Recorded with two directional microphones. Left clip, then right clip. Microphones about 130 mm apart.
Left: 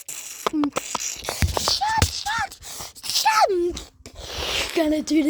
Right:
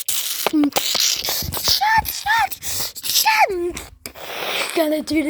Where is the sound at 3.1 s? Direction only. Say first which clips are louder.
Right 2 dB; 25° left (ahead or behind).